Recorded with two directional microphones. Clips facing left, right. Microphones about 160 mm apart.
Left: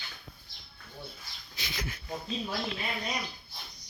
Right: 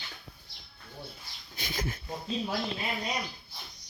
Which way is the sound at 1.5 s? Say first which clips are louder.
Right 4 dB; 45° right (ahead or behind).